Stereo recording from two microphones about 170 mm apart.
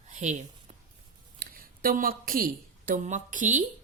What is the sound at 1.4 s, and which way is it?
A woman's voice, 60° right (ahead or behind).